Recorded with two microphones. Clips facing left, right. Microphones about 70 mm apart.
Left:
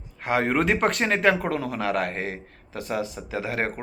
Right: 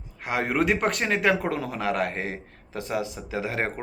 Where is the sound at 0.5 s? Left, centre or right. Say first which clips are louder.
Left 1 dB; left.